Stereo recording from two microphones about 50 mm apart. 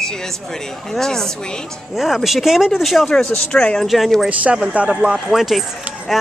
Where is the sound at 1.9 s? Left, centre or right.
Centre.